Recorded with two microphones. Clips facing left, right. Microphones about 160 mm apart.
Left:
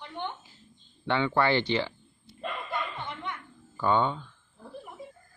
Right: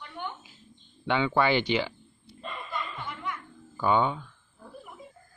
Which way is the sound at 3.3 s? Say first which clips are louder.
Right 2 dB; 25° left (ahead or behind).